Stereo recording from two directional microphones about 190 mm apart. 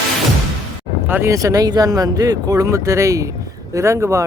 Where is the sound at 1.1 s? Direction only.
15° right (ahead or behind).